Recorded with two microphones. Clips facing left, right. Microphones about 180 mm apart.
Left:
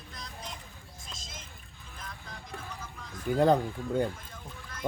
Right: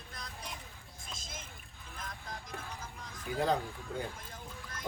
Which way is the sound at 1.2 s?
55° right (ahead or behind).